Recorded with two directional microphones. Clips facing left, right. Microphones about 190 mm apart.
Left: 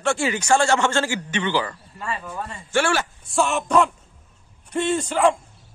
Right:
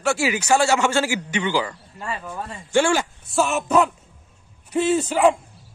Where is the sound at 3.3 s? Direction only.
5° right (ahead or behind).